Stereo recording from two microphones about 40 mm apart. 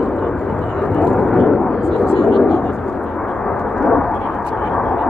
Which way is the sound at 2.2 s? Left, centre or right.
Centre.